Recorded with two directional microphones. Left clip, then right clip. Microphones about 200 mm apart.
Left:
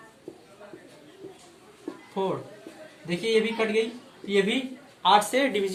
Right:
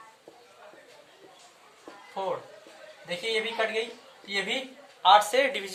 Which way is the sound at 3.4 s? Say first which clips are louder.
Left 4 dB; 25° right (ahead or behind).